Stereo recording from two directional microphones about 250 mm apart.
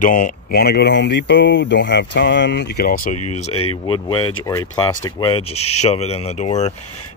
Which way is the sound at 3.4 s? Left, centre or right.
Left.